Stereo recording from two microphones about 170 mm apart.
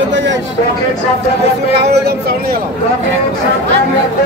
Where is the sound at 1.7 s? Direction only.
75° right (ahead or behind).